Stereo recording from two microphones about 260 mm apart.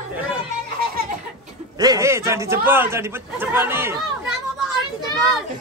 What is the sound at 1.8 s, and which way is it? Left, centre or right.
A man's voice, centre.